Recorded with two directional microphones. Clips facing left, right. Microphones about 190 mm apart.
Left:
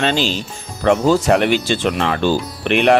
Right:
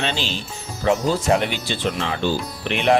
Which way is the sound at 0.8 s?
65° left (ahead or behind).